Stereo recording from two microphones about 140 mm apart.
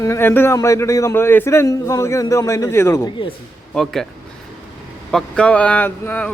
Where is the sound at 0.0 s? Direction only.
20° left (ahead or behind).